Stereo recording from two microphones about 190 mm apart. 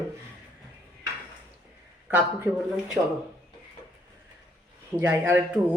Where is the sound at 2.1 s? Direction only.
10° right (ahead or behind).